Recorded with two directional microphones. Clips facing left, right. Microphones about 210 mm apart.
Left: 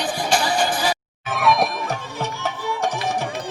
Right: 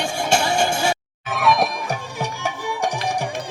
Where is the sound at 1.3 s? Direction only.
Centre (ahead or behind).